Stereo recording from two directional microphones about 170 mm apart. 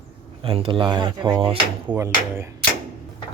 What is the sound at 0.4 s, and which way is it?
Speech, 35° right (ahead or behind).